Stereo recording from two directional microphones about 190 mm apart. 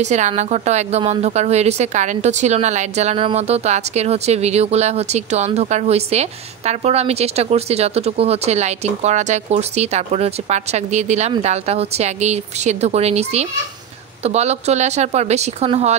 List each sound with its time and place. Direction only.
0.0 s a woman's voice: 35° right (ahead or behind)